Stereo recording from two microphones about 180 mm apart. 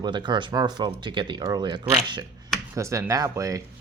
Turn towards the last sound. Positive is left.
turn(degrees=-20)  # may be behind; listen again after turning